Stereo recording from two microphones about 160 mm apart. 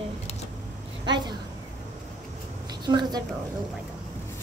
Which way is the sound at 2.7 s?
25° right (ahead or behind).